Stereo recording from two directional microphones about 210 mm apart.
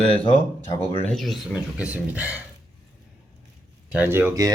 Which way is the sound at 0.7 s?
25° left (ahead or behind).